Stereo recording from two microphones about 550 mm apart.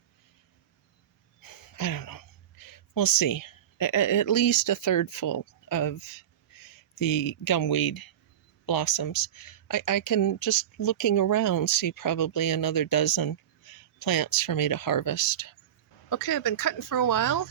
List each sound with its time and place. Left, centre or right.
1.4 s speech: left
7.0 s speech: left